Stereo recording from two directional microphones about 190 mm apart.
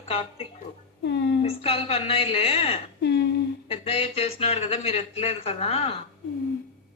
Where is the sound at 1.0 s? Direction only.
65° left (ahead or behind).